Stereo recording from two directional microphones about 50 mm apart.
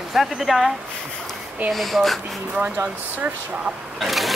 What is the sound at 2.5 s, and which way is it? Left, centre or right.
Speech, right.